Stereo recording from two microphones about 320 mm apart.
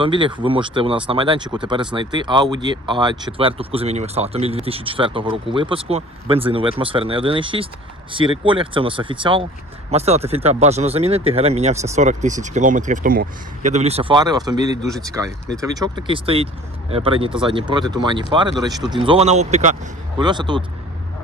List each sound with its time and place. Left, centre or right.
0.0 s speech: centre